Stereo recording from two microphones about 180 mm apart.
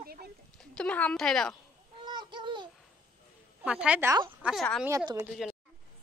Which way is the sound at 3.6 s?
5° right (ahead or behind).